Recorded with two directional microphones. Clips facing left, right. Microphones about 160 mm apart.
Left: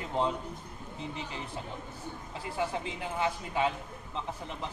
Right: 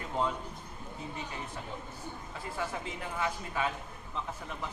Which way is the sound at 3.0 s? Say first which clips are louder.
Left 3 dB; 25° left (ahead or behind).